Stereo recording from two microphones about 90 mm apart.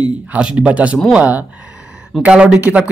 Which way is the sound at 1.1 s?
15° right (ahead or behind).